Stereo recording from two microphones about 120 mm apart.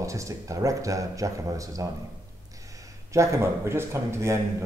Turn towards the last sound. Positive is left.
turn(degrees=-25)  # may be behind; listen again after turning